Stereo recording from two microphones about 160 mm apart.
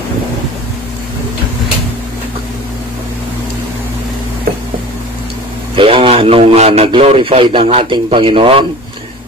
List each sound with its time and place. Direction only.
5.8 s a man's voice: 35° right (ahead or behind)